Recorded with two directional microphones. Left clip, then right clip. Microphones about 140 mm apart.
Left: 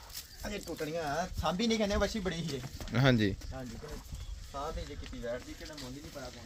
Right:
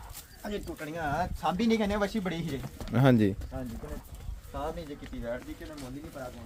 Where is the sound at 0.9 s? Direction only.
45° left (ahead or behind).